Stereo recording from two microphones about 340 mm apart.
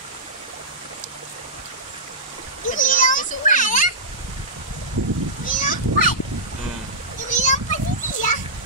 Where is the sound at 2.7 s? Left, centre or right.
Left.